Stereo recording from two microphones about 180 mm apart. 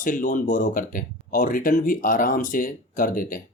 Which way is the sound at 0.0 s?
50° left (ahead or behind).